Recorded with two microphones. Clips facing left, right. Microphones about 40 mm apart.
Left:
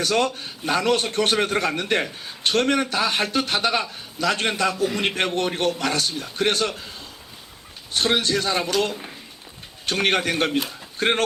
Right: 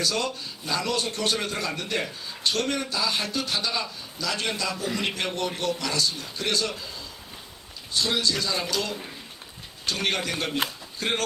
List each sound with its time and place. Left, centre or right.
0.0 s a man's voice: left
7.9 s a man's voice: left